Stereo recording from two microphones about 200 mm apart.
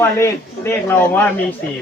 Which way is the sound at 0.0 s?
15° left (ahead or behind).